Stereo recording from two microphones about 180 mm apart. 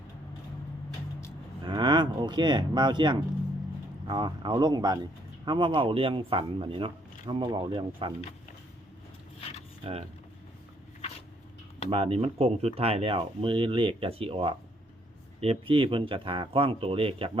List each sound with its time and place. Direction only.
1.6 s a man's voice: 25° right (ahead or behind)
11.9 s a man's voice: 30° right (ahead or behind)